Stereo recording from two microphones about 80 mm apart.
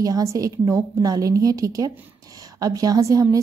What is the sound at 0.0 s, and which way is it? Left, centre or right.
A woman's voice, right.